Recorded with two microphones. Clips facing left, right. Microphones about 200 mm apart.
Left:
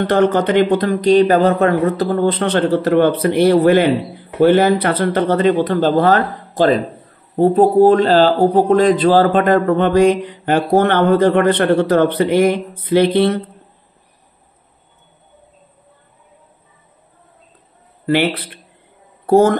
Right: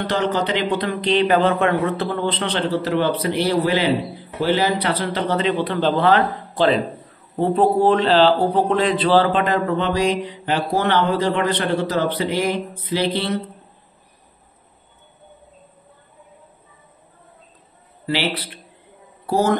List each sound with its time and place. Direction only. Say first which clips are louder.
0.1 s speech: left 7 dB; 55° left (ahead or behind)
18.0 s a man's voice: left 7 dB; 55° left (ahead or behind)